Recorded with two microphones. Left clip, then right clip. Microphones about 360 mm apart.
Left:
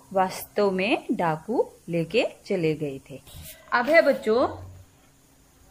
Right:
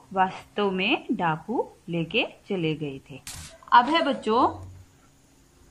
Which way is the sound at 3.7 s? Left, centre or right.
Centre.